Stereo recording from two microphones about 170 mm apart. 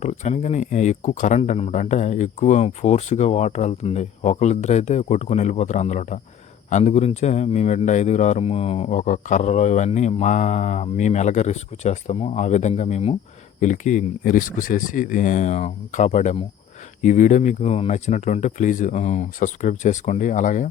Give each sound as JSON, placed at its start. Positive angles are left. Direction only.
{"t": 0.0, "sound": "speech", "side_deg": 45}